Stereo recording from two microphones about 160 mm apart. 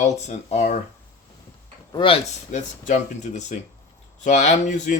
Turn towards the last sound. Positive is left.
turn(degrees=50)  # may be behind; listen again after turning